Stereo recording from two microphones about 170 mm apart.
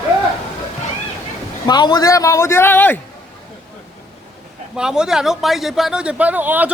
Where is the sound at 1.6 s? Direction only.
25° left (ahead or behind).